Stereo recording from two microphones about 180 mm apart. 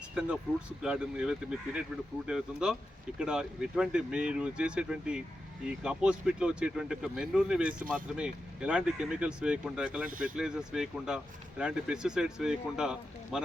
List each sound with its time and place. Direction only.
0.1 s speech: 5° right (ahead or behind)
10.1 s speech: 50° right (ahead or behind)
10.3 s speech: 5° right (ahead or behind)